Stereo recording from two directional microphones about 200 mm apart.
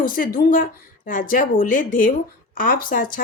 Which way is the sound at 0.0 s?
45° left (ahead or behind).